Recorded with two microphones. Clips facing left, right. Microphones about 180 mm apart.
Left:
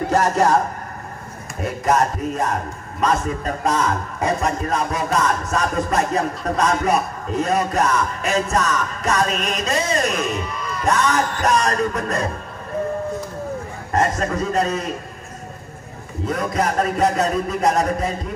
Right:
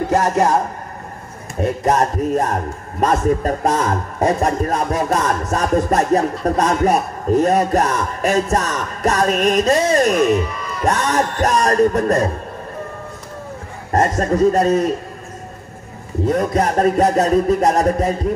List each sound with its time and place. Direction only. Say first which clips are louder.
0.1 s a man's voice: right 1 dB; 20° right (ahead or behind)
1.6 s music: right 3 dB; 35° right (ahead or behind)
3.0 s a man's voice: right 5 dB; 45° right (ahead or behind)
10.9 s music: right 1 dB; 35° right (ahead or behind)
13.9 s music: right 4 dB; 40° right (ahead or behind)
16.3 s music: right 4 dB; 40° right (ahead or behind)